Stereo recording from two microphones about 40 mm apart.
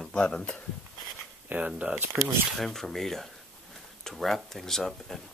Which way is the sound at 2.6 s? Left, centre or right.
Centre.